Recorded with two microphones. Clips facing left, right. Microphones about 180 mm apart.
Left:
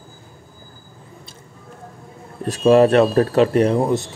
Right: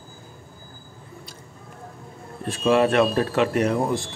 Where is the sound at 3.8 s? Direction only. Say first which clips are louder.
Left 5 dB; 20° left (ahead or behind).